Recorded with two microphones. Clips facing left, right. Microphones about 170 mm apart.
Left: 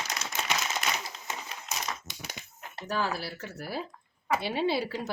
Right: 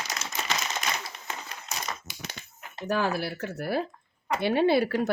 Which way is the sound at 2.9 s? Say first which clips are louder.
Right 4 dB; 55° right (ahead or behind).